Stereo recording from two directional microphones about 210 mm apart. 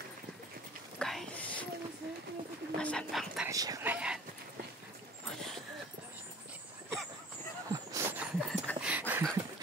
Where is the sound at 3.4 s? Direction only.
15° right (ahead or behind).